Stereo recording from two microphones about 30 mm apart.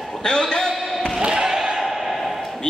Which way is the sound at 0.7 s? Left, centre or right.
Centre.